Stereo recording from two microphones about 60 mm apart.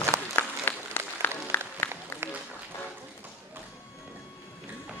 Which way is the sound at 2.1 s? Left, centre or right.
Left.